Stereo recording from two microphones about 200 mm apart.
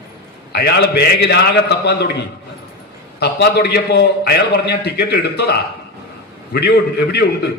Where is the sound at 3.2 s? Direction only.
55° left (ahead or behind).